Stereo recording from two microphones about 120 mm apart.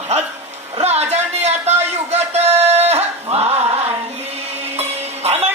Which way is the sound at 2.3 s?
65° right (ahead or behind).